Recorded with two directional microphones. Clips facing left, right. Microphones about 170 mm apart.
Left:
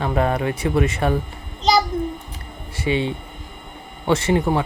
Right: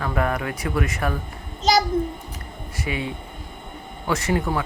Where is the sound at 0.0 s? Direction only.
25° left (ahead or behind).